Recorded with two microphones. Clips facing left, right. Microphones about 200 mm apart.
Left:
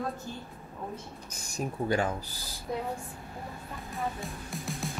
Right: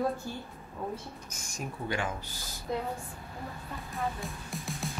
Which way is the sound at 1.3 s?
35° left (ahead or behind).